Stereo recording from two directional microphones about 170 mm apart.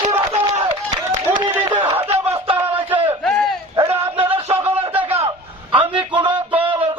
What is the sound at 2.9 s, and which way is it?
Battle cry, 30° right (ahead or behind).